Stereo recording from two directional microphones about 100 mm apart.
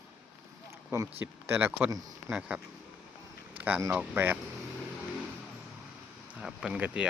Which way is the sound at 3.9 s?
20° right (ahead or behind).